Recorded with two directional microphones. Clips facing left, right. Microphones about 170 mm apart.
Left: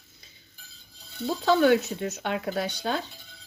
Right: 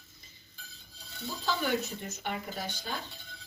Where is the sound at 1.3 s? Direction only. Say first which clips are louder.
Left 11 dB; 70° left (ahead or behind).